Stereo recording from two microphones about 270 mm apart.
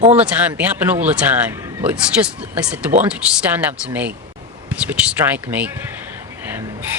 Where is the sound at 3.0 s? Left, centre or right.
Centre.